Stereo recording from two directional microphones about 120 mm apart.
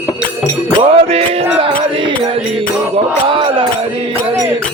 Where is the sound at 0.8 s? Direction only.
50° right (ahead or behind).